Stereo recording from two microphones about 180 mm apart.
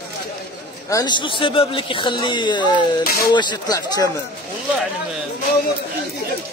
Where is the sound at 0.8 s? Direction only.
20° left (ahead or behind).